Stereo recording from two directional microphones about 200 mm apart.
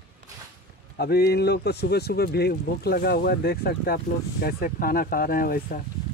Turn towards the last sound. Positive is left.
turn(degrees=45)  # may be behind; listen again after turning